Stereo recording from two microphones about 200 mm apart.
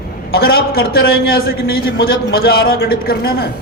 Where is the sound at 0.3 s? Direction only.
50° left (ahead or behind).